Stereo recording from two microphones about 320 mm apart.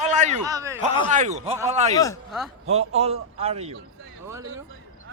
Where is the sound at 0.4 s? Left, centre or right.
Centre.